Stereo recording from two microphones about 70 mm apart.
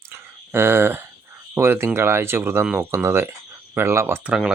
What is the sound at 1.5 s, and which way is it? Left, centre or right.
Speech, right.